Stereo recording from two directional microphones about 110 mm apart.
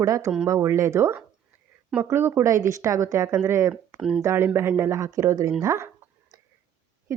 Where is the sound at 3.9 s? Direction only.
5° right (ahead or behind).